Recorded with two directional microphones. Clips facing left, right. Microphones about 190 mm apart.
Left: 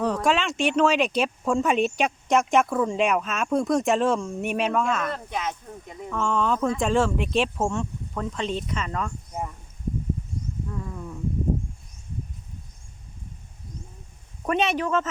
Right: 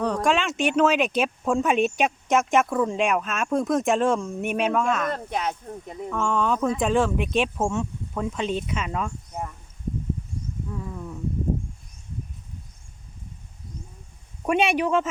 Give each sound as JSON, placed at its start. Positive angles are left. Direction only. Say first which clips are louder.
{"t": 0.0, "sound": "speech", "louder": "even", "side_deg": 5}
{"t": 5.1, "sound": "speech", "louder": "right 2 dB", "side_deg": -35}
{"t": 6.1, "sound": "speech", "louder": "even", "side_deg": 0}
{"t": 10.7, "sound": "a sound", "louder": "right 1 dB", "side_deg": -5}
{"t": 14.4, "sound": "speech", "louder": "right 2 dB", "side_deg": -10}